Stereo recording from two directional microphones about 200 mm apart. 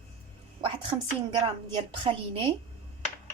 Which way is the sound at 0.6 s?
25° right (ahead or behind).